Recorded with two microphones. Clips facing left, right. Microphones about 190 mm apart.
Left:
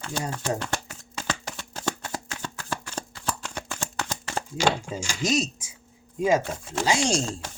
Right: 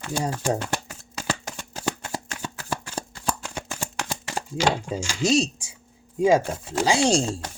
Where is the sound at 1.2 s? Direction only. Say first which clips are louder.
Right 2 dB; 10° right (ahead or behind).